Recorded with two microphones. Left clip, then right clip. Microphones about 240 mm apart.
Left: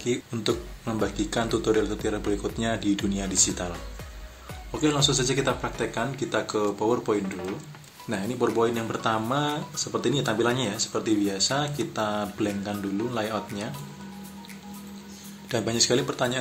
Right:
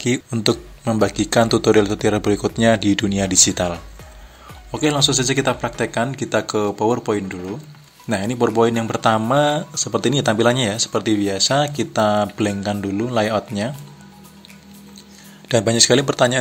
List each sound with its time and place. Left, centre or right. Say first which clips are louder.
0.0 s speech: right 8 dB; right
4.7 s speech: right 6 dB; right
15.4 s speech: right 9 dB; right